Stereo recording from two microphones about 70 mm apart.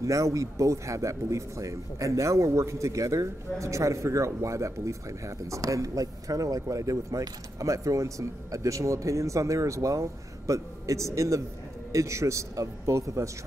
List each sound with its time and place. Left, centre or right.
0.0 s speech: right